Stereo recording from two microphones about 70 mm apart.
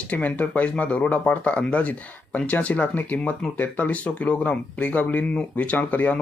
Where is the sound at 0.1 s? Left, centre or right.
Left.